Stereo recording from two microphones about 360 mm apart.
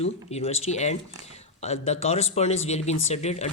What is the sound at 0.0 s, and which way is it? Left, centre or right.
Speech, centre.